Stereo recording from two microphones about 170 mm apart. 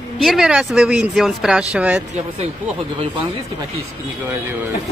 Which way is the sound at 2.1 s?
40° right (ahead or behind).